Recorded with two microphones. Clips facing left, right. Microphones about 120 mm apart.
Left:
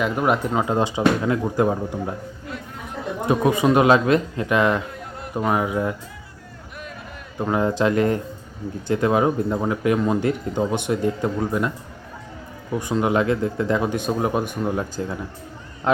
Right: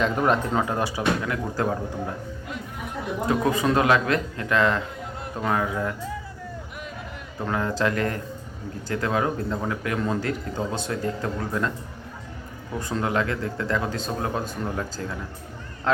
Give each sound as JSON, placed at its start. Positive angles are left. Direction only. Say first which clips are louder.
{"t": 0.0, "sound": "speech", "louder": "left 1 dB", "side_deg": 10}
{"t": 3.2, "sound": "speech", "louder": "left 4 dB", "side_deg": 20}
{"t": 7.3, "sound": "speech", "louder": "left 5 dB", "side_deg": 20}
{"t": 12.8, "sound": "speech", "louder": "left 5 dB", "side_deg": 15}